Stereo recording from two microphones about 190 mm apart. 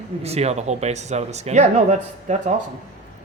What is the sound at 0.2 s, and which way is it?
Speech, 35° right (ahead or behind).